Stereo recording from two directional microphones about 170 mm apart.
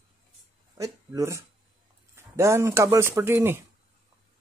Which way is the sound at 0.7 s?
20° right (ahead or behind).